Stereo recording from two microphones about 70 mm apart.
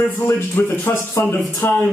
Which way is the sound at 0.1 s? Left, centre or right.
Left.